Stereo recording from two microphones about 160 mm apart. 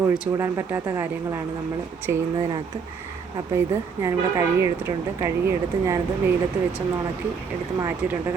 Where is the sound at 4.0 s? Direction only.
20° right (ahead or behind).